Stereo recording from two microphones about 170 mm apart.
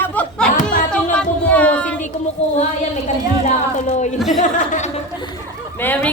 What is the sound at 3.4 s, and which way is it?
Speech, 40° left (ahead or behind).